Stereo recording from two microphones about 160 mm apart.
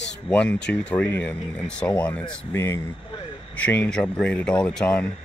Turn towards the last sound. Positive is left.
turn(degrees=5)  # may be behind; listen again after turning